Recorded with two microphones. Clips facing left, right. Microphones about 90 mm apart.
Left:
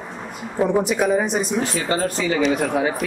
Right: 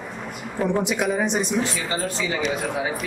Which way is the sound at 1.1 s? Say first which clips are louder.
Left 3 dB; 5° left (ahead or behind).